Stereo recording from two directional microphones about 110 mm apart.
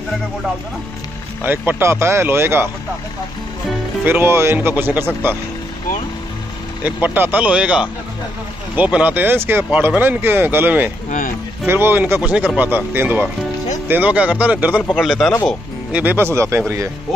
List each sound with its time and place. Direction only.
1.4 s speech: 20° right (ahead or behind)
4.0 s speech: 20° right (ahead or behind)
6.8 s speech: 15° right (ahead or behind)
15.0 s speech: centre (ahead or behind)
15.9 s speech: 15° right (ahead or behind)